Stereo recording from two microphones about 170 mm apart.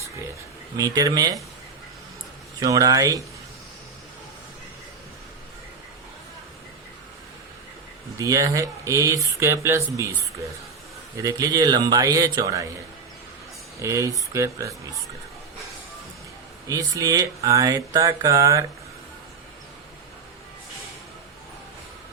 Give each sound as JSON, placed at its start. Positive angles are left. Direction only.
{"t": 0.8, "sound": "speech", "side_deg": -20}
{"t": 2.6, "sound": "speech", "side_deg": -20}
{"t": 8.2, "sound": "speech", "side_deg": -20}
{"t": 11.2, "sound": "speech", "side_deg": -20}
{"t": 13.8, "sound": "speech", "side_deg": -15}
{"t": 16.6, "sound": "speech", "side_deg": -20}